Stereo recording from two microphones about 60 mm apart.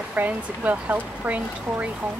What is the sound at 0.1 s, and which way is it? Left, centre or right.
Speech, right.